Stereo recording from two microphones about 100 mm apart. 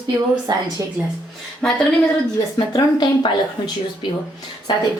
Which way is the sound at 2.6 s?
50° left (ahead or behind).